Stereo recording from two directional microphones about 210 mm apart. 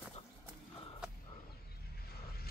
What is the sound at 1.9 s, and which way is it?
Mechanisms, 45° left (ahead or behind).